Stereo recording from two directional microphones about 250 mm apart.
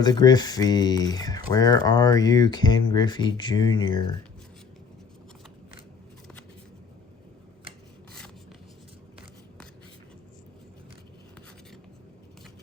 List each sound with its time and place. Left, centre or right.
0.0 s speech: centre